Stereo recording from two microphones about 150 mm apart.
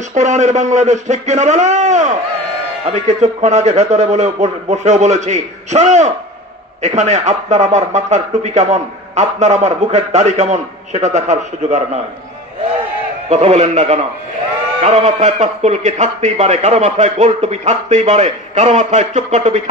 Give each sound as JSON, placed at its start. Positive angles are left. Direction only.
{"t": 0.1, "sound": "speech", "side_deg": -50}
{"t": 13.3, "sound": "speech", "side_deg": -50}